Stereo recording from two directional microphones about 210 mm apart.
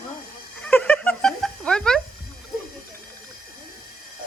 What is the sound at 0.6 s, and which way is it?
Music, 10° left (ahead or behind).